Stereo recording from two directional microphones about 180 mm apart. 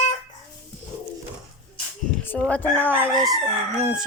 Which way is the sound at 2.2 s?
10° left (ahead or behind).